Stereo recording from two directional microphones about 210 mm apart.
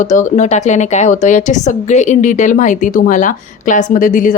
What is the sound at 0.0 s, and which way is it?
A woman's voice, 35° left (ahead or behind).